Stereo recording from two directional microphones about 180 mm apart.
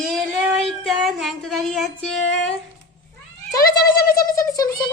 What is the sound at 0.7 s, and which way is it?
Female singing, centre (ahead or behind).